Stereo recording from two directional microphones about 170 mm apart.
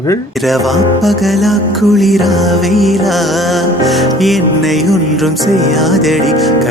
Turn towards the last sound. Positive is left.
turn(degrees=0)  # may be behind; listen again after turning